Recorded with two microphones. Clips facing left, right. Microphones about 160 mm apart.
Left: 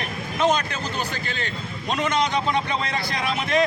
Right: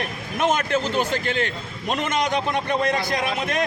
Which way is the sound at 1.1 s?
55° right (ahead or behind).